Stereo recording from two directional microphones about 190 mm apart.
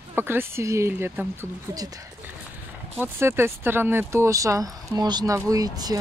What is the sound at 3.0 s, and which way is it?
Speech, 10° right (ahead or behind).